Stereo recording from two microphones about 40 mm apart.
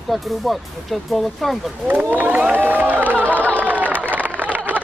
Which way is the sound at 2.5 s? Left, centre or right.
Right.